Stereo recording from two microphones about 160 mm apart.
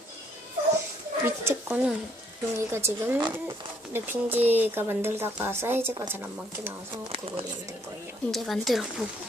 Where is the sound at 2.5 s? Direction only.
15° right (ahead or behind).